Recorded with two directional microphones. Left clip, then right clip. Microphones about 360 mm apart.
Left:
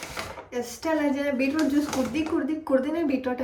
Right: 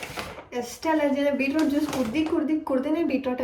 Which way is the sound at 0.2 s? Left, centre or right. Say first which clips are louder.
Left 1 dB; centre.